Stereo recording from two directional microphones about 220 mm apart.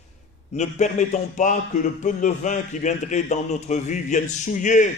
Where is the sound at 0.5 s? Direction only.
30° left (ahead or behind).